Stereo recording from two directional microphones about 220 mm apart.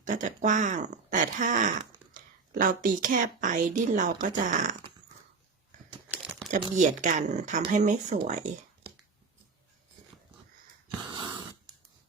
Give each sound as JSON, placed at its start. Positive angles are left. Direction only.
{"t": 0.0, "sound": "speech", "side_deg": -35}
{"t": 6.1, "sound": "crumpling", "side_deg": -5}
{"t": 6.7, "sound": "speech", "side_deg": -35}
{"t": 11.1, "sound": "wheeze", "side_deg": -20}